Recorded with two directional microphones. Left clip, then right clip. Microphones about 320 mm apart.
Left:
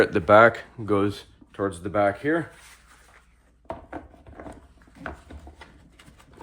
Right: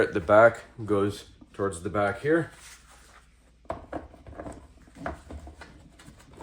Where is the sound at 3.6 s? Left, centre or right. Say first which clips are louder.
Even; centre.